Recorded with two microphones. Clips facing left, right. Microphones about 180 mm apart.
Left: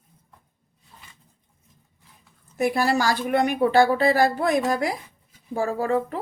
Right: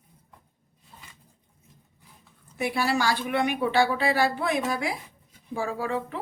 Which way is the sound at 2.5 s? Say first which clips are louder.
Left 4 dB; 45° left (ahead or behind).